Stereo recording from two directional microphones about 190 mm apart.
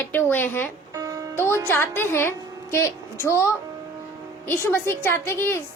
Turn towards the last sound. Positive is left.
turn(degrees=10)  # may be behind; listen again after turning